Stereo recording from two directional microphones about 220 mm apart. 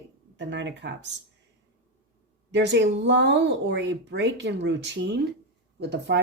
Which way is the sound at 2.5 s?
55° right (ahead or behind).